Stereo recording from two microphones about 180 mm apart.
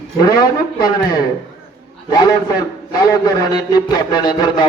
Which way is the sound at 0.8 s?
20° left (ahead or behind).